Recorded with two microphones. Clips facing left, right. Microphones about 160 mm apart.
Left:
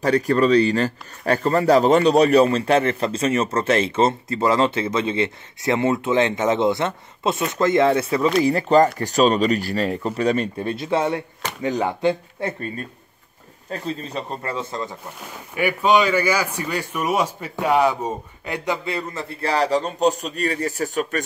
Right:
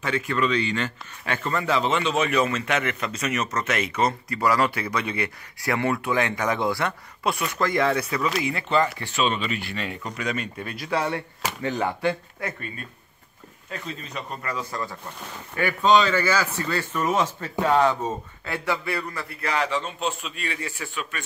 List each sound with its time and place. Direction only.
0.0 s speech: 40° left (ahead or behind)
8.4 s speech: 35° left (ahead or behind)
15.5 s a man's voice: 10° left (ahead or behind); by 21.2 s 40° left (ahead or behind)